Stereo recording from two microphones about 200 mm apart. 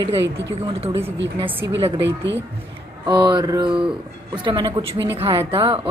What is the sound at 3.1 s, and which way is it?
Speech, 20° right (ahead or behind).